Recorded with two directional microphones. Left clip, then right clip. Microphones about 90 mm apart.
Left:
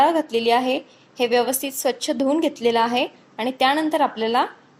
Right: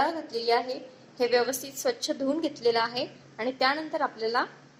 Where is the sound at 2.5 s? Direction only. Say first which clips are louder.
Left 6 dB; 75° left (ahead or behind).